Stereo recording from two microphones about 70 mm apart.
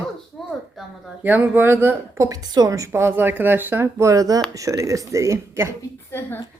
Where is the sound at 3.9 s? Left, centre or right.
Right.